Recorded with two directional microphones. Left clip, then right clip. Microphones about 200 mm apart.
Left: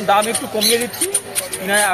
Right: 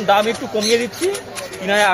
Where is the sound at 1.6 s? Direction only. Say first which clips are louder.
Right 2 dB; 40° right (ahead or behind).